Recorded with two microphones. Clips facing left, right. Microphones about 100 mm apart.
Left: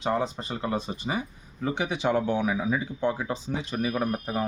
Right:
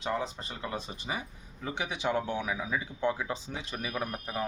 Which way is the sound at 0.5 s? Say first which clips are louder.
Left 9 dB; 50° left (ahead or behind).